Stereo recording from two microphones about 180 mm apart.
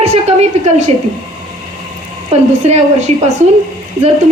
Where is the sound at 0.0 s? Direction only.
35° right (ahead or behind).